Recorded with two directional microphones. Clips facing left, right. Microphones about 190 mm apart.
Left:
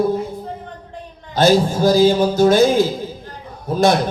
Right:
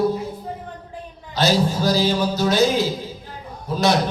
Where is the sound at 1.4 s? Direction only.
50° left (ahead or behind).